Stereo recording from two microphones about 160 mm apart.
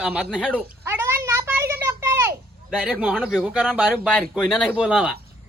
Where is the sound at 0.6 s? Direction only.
15° right (ahead or behind).